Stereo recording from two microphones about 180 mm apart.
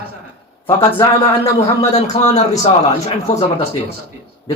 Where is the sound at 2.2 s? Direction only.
40° left (ahead or behind).